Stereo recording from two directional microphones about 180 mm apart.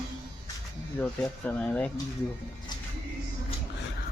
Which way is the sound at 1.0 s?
5° left (ahead or behind).